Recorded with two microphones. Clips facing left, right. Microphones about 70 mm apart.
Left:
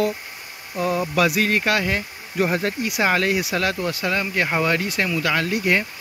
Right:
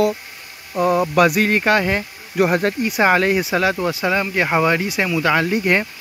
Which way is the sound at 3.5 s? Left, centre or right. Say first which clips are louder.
Right 4 dB; centre.